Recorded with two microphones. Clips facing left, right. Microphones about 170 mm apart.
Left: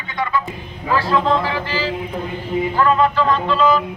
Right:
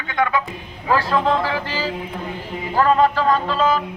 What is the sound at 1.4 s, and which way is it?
A man's voice, 45° right (ahead or behind).